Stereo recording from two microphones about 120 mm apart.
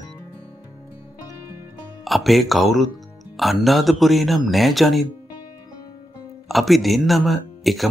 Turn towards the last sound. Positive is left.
turn(degrees=0)  # may be behind; listen again after turning